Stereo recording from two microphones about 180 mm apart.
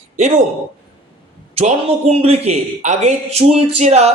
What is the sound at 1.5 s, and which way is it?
Speech, 35° right (ahead or behind).